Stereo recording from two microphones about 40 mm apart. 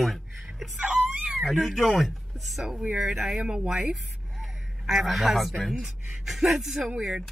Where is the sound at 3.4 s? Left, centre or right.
Centre.